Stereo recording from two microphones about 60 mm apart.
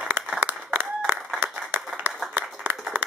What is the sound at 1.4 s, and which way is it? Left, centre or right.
Clapping, right.